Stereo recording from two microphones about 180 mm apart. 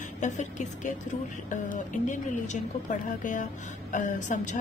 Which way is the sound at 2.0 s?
45° left (ahead or behind).